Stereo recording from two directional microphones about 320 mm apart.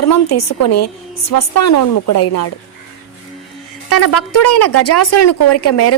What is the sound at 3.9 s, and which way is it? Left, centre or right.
Speech, left.